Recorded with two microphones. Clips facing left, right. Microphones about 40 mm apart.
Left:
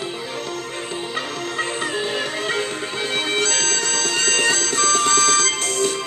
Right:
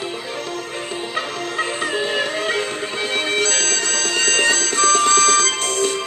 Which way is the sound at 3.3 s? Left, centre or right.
Centre.